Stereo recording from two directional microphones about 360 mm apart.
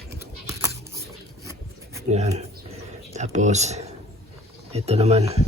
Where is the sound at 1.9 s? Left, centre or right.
Centre.